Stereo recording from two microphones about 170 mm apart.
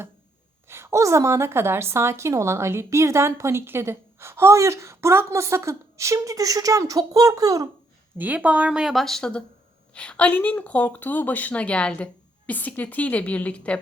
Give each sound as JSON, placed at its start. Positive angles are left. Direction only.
{"t": 0.7, "sound": "a woman's voice", "side_deg": -15}
{"t": 8.2, "sound": "a woman's voice", "side_deg": -10}